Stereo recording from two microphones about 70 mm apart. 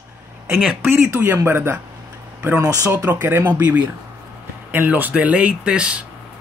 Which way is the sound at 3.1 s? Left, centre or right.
Right.